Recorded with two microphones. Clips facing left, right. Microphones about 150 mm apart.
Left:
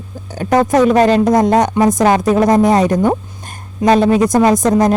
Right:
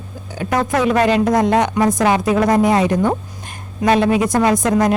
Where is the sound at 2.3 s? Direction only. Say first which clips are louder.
Left 3 dB; 20° left (ahead or behind).